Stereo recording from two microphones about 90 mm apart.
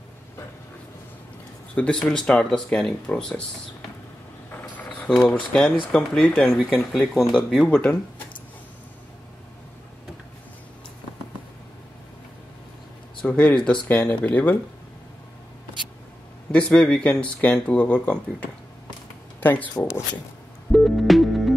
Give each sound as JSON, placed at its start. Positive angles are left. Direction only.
{"t": 1.8, "sound": "speech", "side_deg": 10}
{"t": 5.2, "sound": "speech", "side_deg": 15}
{"t": 7.6, "sound": "speech", "side_deg": 15}
{"t": 13.2, "sound": "speech", "side_deg": 15}
{"t": 16.5, "sound": "speech", "side_deg": 10}
{"t": 19.4, "sound": "speech", "side_deg": 20}
{"t": 20.7, "sound": "music", "side_deg": 0}